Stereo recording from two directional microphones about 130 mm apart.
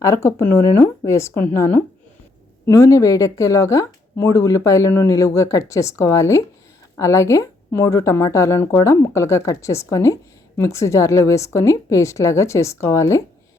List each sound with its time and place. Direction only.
0.0 s speech: 20° left (ahead or behind)